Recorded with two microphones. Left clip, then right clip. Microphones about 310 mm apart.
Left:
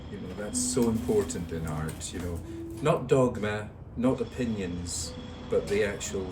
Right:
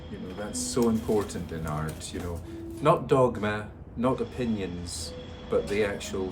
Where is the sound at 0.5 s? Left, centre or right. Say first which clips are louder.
Even; centre.